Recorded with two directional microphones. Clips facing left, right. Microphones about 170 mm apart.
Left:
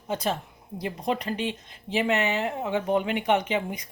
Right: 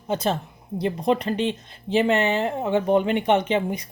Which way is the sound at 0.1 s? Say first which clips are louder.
Right 4 dB; 25° right (ahead or behind).